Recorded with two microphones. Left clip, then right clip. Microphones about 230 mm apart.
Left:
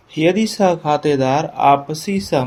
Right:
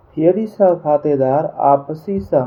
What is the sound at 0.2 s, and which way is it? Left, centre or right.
Speech, left.